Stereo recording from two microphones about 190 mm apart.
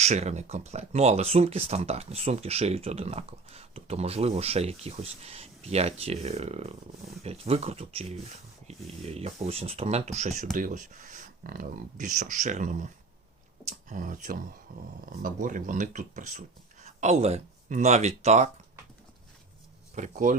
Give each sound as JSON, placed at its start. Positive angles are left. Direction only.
{"t": 0.0, "sound": "speech", "side_deg": -35}
{"t": 20.0, "sound": "speech", "side_deg": -45}